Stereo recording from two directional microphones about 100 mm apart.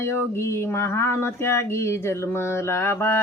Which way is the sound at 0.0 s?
25° left (ahead or behind).